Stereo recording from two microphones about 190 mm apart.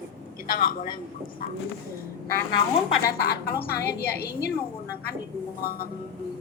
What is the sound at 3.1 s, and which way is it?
A woman's voice, 55° left (ahead or behind).